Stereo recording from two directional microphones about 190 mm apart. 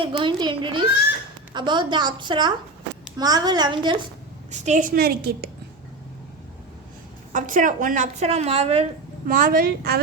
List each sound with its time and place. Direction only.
0.0 s a woman's voice: 25° right (ahead or behind)
4.5 s a woman's voice: 40° right (ahead or behind); by 5.5 s 55° right (ahead or behind)
7.3 s a woman's voice: 45° right (ahead or behind)
9.2 s a woman's voice: 45° right (ahead or behind)